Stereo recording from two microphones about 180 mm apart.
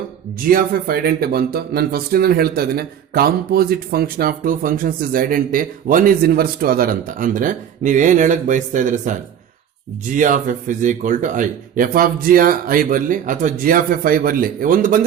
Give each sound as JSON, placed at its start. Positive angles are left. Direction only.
{"t": 0.5, "sound": "speech", "side_deg": -55}
{"t": 10.2, "sound": "speech", "side_deg": -45}